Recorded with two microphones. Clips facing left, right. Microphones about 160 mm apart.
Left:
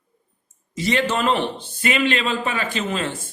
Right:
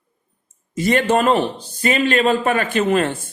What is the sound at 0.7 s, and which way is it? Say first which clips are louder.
A man's voice: right 5 dB; 50° right (ahead or behind).